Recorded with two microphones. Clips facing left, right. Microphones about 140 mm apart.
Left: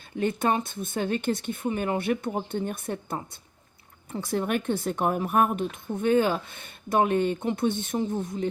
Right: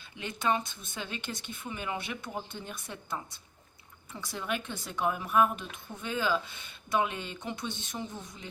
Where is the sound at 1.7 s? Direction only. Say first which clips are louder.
Left 10 dB; 45° left (ahead or behind).